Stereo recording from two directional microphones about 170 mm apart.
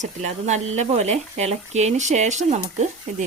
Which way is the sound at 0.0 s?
40° right (ahead or behind).